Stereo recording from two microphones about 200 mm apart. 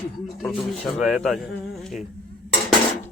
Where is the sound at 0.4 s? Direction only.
Centre (ahead or behind).